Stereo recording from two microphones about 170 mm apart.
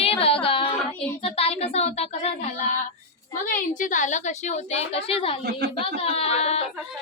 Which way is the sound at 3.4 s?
50° left (ahead or behind).